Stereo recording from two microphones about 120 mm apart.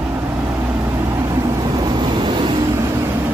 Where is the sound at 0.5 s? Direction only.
20° right (ahead or behind); by 2.6 s 40° right (ahead or behind).